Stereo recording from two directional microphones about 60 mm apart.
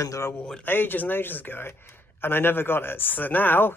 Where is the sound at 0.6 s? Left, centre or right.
Left.